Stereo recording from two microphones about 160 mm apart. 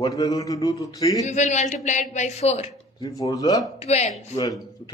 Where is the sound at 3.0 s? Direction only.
20° left (ahead or behind).